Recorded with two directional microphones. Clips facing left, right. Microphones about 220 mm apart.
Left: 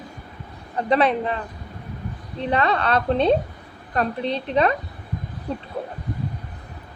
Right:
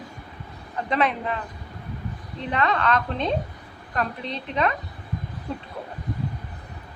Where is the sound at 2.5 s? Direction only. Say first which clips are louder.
Left 2 dB; 35° left (ahead or behind).